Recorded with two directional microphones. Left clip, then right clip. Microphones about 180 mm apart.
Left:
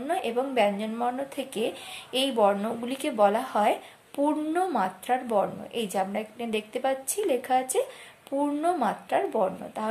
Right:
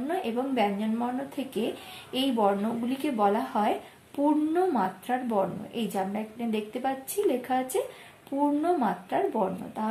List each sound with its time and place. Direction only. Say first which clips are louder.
0.1 s a woman's voice: left 3 dB; 40° left (ahead or behind)